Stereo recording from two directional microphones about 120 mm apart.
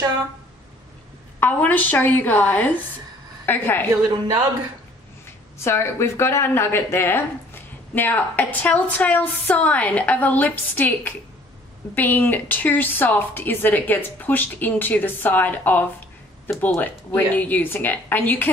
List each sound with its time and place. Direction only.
1.4 s a woman's voice: 15° left (ahead or behind)
5.6 s a woman's voice: 20° left (ahead or behind)